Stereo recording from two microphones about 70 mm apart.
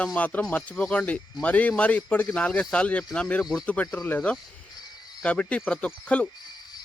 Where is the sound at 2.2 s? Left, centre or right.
Centre.